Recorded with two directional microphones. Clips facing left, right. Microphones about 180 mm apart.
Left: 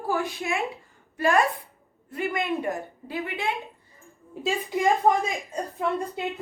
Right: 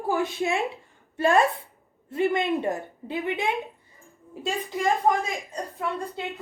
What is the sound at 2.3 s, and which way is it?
A woman's voice, 25° right (ahead or behind).